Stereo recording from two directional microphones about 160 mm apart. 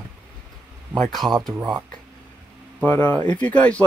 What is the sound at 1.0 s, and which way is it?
Speech, centre (ahead or behind).